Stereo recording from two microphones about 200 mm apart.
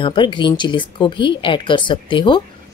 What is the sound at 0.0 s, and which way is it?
A woman's voice, 25° left (ahead or behind).